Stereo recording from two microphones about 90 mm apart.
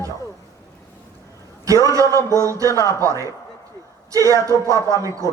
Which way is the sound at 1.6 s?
40° right (ahead or behind).